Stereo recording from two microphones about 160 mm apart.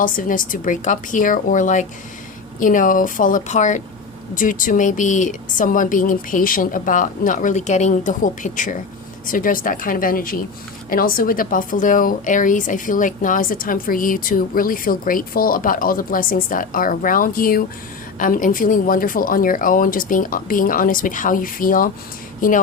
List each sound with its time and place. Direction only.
0.0 s a woman's voice: 55° left (ahead or behind)